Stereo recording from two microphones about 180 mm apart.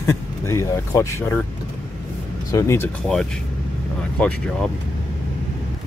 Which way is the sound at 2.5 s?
15° left (ahead or behind).